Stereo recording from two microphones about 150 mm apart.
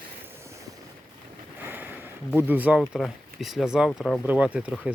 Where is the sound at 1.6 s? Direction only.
15° right (ahead or behind).